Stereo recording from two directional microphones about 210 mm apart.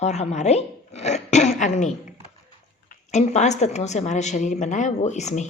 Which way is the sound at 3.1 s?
35° left (ahead or behind).